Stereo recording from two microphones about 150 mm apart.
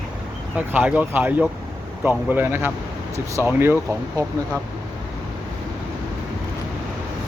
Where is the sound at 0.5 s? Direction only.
10° right (ahead or behind).